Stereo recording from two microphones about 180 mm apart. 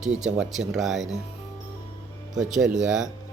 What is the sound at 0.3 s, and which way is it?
Speech, 5° right (ahead or behind).